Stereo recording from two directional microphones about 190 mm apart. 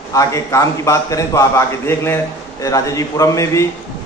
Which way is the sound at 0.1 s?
15° left (ahead or behind).